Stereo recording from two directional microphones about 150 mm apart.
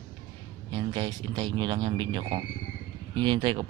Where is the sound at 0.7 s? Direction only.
30° right (ahead or behind).